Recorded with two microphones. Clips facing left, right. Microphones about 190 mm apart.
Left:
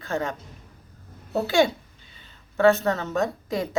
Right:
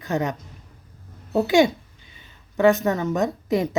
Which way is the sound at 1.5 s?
15° right (ahead or behind).